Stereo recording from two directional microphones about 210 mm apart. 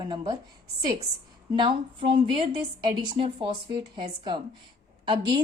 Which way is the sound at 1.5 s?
25° right (ahead or behind).